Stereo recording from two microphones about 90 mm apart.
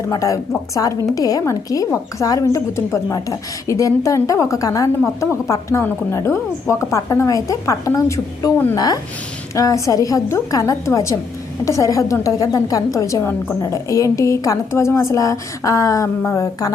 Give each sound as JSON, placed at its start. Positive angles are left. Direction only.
{"t": 0.1, "sound": "a woman's voice", "side_deg": 35}